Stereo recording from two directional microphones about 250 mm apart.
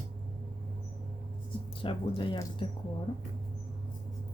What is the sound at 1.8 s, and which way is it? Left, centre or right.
Speech, centre.